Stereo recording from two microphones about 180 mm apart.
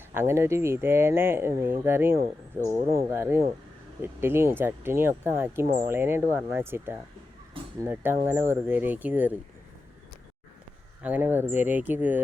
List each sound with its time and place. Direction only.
0.1 s speech: 15° right (ahead or behind)
11.0 s speech: 10° right (ahead or behind)